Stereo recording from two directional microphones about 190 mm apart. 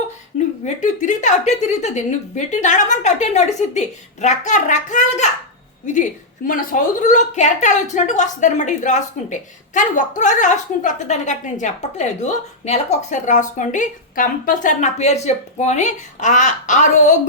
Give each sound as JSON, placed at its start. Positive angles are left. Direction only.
{"t": 0.6, "sound": "a woman's voice", "side_deg": 40}